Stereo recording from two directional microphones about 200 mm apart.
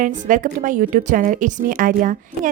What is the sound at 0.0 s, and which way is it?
A woman's voice, 40° right (ahead or behind).